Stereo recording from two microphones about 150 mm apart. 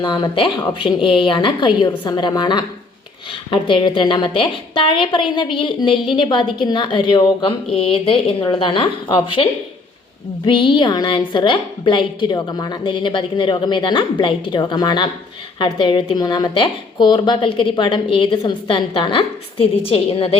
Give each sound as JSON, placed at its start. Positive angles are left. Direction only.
{"t": 0.0, "sound": "a woman's voice", "side_deg": 30}